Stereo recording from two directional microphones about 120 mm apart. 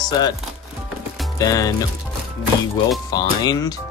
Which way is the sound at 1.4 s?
30° left (ahead or behind).